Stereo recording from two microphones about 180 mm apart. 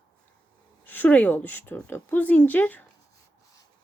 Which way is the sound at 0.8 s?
10° left (ahead or behind).